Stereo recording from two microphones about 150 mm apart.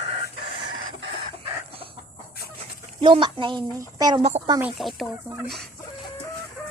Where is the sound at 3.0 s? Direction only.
35° right (ahead or behind).